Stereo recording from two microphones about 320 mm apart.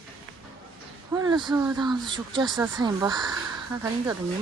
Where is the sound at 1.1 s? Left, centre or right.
Centre.